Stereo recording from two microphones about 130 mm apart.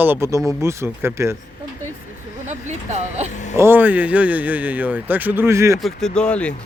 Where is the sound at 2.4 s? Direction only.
60° right (ahead or behind).